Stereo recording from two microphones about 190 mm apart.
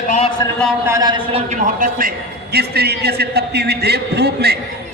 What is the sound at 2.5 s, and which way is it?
A man's voice, 55° right (ahead or behind).